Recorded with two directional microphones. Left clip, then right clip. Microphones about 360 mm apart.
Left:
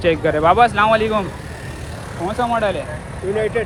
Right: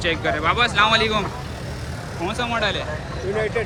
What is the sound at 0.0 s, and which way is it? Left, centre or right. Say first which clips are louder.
Speech: left 6 dB; centre.